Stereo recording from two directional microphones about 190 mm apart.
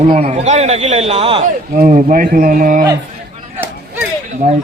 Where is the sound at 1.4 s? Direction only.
45° right (ahead or behind).